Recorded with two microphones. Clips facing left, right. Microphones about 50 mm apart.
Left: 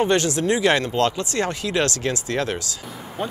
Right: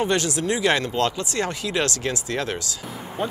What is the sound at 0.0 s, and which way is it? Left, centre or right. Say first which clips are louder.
Speech: left 3 dB; left.